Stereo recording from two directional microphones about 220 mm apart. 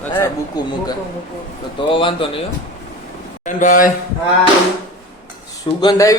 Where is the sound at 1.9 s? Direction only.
25° left (ahead or behind).